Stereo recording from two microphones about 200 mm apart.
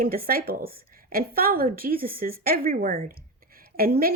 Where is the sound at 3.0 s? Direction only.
45° right (ahead or behind).